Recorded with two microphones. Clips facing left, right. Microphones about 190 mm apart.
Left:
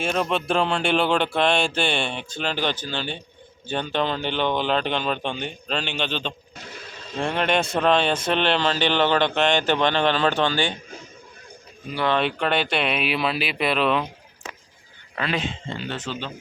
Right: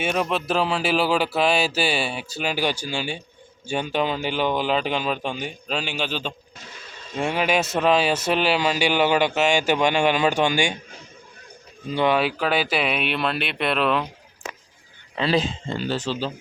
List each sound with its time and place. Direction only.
0.0 s speech: 5° right (ahead or behind)
11.9 s speech: 10° right (ahead or behind)
15.2 s speech: 35° right (ahead or behind)